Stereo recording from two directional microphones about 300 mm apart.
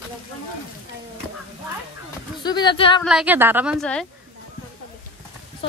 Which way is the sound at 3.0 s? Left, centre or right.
Centre.